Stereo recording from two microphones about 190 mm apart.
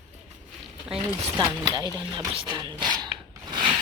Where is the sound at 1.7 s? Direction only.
20° right (ahead or behind).